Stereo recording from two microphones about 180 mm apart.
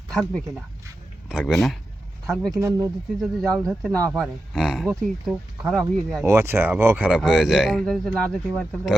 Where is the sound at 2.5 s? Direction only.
15° right (ahead or behind).